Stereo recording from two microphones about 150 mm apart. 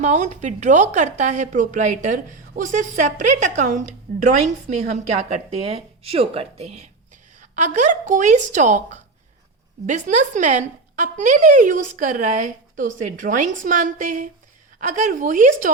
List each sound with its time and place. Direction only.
0.0 s a woman's voice: 50° right (ahead or behind)
5.1 s a woman's voice: 45° right (ahead or behind)